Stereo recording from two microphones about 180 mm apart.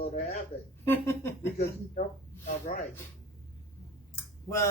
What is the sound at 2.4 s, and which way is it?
Speech, 45° left (ahead or behind).